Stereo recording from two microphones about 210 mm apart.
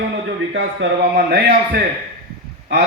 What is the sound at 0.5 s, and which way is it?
A man's voice, 60° right (ahead or behind).